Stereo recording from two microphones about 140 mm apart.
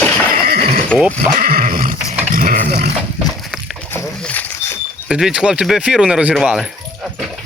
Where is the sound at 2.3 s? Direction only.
90° right.